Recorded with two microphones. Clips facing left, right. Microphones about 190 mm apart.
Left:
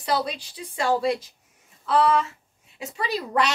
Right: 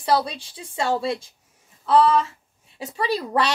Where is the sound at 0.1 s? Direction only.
25° right (ahead or behind).